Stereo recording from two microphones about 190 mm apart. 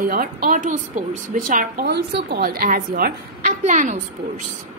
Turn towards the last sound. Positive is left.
turn(degrees=-40)  # may be behind; listen again after turning